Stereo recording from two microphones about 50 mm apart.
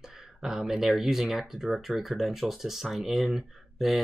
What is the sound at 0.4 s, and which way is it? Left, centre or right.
Speech, centre.